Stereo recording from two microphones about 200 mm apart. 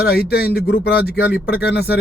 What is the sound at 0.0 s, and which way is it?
Speech, 50° left (ahead or behind).